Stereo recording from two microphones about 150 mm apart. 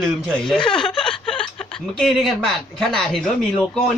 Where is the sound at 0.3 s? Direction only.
5° left (ahead or behind).